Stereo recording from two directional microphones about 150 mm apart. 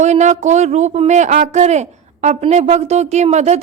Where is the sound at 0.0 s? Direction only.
50° right (ahead or behind).